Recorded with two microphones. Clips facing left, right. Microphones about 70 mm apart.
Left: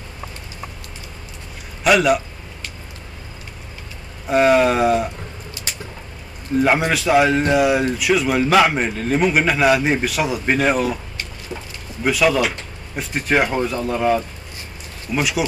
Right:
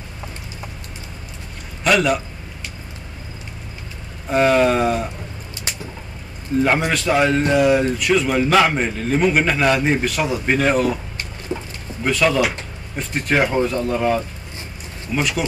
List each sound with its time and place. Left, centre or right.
1.9 s a man's voice: centre
4.3 s a man's voice: centre
6.6 s a man's voice: centre
11.5 s speech: centre
12.0 s a man's voice: centre